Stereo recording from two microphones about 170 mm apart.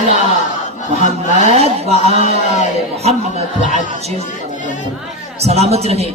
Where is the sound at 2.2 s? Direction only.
45° left (ahead or behind).